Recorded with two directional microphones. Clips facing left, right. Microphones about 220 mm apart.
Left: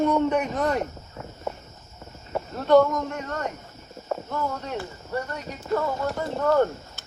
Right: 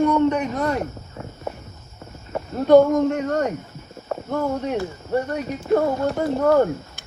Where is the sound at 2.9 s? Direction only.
45° right (ahead or behind).